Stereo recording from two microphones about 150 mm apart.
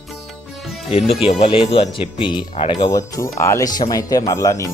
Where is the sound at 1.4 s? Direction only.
35° left (ahead or behind).